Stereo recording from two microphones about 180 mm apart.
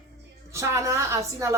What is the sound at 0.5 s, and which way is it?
Speech, 15° right (ahead or behind).